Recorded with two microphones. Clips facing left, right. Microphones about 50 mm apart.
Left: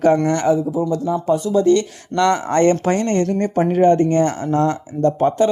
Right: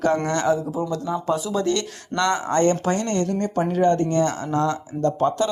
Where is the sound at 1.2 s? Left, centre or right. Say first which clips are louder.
Left 8 dB; right.